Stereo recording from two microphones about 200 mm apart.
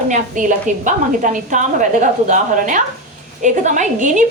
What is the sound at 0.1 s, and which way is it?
A woman's voice, 40° right (ahead or behind).